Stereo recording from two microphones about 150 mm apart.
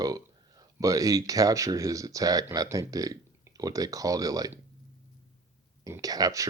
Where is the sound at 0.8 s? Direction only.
25° right (ahead or behind).